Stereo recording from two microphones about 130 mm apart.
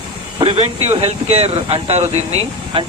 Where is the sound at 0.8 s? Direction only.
55° right (ahead or behind).